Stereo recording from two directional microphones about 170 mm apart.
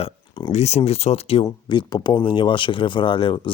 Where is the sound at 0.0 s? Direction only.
25° left (ahead or behind).